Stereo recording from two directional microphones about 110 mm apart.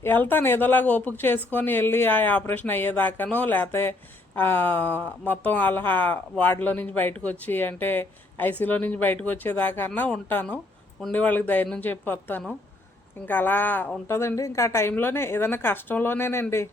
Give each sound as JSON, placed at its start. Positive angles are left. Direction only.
{"t": 0.0, "sound": "a woman's voice", "side_deg": 20}